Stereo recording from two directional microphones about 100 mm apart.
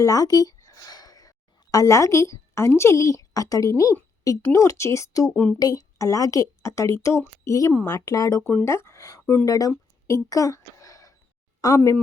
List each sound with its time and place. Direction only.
0.0 s a woman's voice: 35° left (ahead or behind)
5.3 s speech: 10° left (ahead or behind)
5.5 s a woman's voice: 35° left (ahead or behind)
9.2 s speech: 20° left (ahead or behind)
9.5 s a sound: 35° left (ahead or behind)
11.6 s a woman's voice: 35° left (ahead or behind)